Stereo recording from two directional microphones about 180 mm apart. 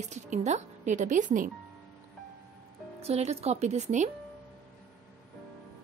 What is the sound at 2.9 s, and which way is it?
A woman's voice, 35° right (ahead or behind).